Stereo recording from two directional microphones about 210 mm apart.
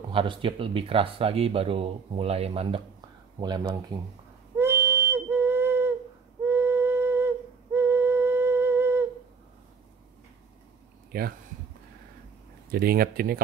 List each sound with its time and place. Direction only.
0.1 s speech: 25° right (ahead or behind)
4.6 s whistle: 10° right (ahead or behind)
6.4 s flute: 10° right (ahead or behind)
11.1 s speech: 45° right (ahead or behind)
12.7 s speech: 45° right (ahead or behind)